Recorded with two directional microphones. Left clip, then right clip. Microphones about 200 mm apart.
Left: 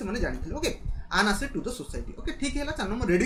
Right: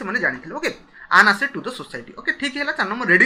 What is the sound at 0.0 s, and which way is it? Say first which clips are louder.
Speech: right 11 dB; 20° left (ahead or behind).